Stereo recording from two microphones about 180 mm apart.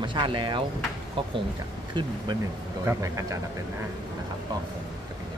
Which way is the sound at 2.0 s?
25° right (ahead or behind).